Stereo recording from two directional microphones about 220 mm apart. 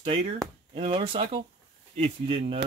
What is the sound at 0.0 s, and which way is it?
Speech, 25° right (ahead or behind).